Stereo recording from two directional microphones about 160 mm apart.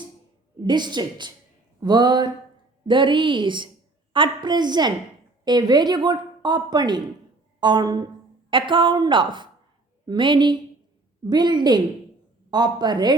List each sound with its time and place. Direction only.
0.6 s a woman's voice: 25° right (ahead or behind)